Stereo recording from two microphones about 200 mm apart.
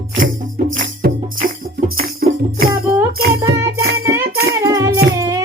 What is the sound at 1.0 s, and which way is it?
Music, 50° right (ahead or behind).